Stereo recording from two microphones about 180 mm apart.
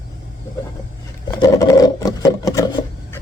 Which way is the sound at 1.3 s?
20° left (ahead or behind).